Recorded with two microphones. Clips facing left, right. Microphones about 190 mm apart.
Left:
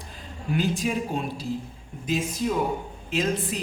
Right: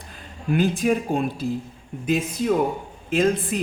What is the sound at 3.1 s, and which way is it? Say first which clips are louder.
Speech: right 6 dB; 55° right (ahead or behind).